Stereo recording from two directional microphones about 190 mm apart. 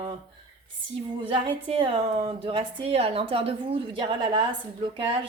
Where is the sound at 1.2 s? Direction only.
30° right (ahead or behind).